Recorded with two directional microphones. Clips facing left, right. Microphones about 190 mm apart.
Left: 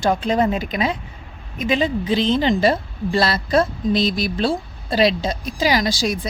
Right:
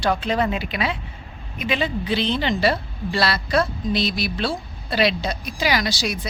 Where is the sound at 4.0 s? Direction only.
45° left (ahead or behind).